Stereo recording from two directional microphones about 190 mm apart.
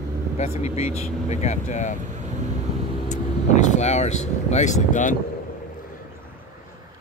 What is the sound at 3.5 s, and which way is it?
Speech, 40° left (ahead or behind).